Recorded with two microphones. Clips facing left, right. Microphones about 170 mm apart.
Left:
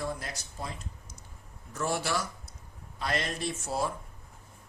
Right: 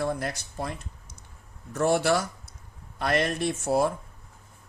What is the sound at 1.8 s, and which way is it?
Speech, 60° right (ahead or behind).